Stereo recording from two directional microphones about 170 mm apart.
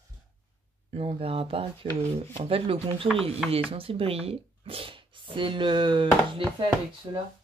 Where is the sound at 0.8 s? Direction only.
35° right (ahead or behind).